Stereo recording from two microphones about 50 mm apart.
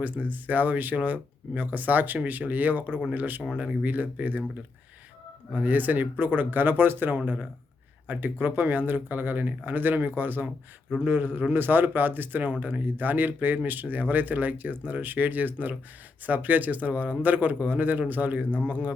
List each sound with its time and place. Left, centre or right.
0.0 s speech: right
3.5 s speech: centre
3.8 s speech: right
5.5 s speech: right